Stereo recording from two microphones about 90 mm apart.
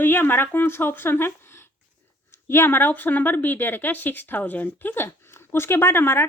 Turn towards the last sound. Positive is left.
turn(degrees=25)  # may be behind; listen again after turning